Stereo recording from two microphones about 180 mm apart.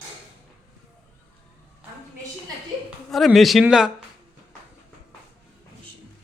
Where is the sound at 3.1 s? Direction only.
Centre (ahead or behind).